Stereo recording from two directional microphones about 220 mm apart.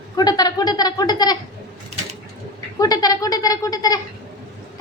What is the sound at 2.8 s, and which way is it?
A woman's voice, 15° left (ahead or behind).